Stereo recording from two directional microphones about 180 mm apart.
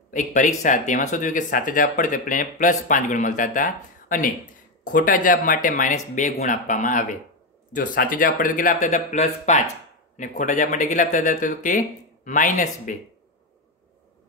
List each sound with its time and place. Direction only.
0.1 s speech: 45° left (ahead or behind)